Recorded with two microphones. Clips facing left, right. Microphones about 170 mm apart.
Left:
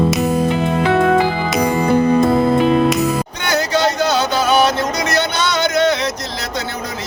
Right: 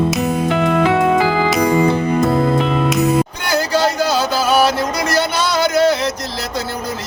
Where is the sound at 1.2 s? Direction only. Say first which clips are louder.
Right 3 dB; 90° right.